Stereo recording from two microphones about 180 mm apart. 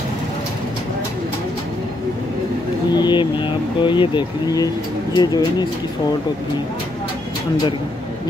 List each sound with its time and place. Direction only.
2.9 s vehicle: 25° left (ahead or behind)
5.1 s speech: 20° left (ahead or behind)